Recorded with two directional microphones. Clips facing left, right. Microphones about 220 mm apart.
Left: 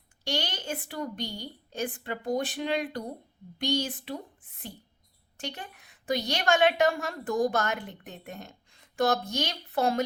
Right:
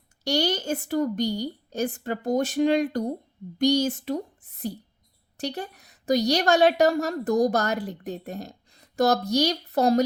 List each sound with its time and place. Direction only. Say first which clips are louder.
0.3 s a woman's voice: right 8 dB; 40° right (ahead or behind)